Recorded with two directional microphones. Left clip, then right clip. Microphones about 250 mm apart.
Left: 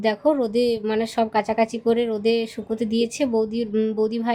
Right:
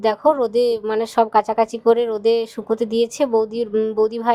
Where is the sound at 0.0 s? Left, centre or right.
Centre.